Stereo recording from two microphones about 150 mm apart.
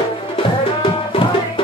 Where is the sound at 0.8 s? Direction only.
35° left (ahead or behind).